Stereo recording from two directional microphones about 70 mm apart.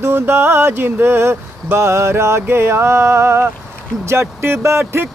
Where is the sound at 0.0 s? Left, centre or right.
Right.